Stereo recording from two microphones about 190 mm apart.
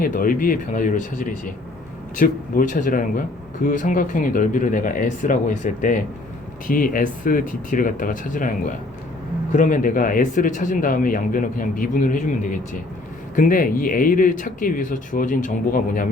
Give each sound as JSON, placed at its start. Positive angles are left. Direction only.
{"t": 0.0, "sound": "a man's voice", "side_deg": 45}